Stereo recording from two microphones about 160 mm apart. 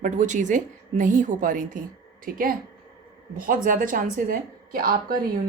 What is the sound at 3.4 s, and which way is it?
A woman's voice, 55° right (ahead or behind).